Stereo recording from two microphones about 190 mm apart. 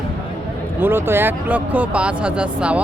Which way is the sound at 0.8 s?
10° right (ahead or behind).